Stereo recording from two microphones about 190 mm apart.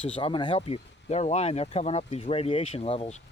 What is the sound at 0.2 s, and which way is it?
Speech, 25° left (ahead or behind).